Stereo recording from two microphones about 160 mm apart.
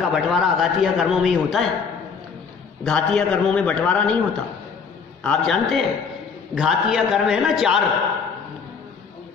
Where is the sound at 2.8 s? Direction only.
5° left (ahead or behind).